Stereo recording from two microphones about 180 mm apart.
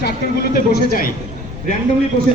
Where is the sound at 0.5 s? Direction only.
50° left (ahead or behind).